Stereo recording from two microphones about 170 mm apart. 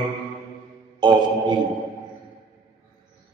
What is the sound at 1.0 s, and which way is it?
Music, 25° right (ahead or behind).